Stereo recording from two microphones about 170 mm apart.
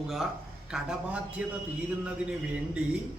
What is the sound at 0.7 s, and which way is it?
Speech, 5° right (ahead or behind).